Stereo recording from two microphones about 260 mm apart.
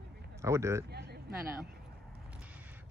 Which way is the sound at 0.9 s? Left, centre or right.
Right.